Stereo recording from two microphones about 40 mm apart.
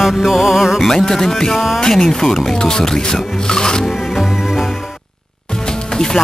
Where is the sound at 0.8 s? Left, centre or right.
Centre.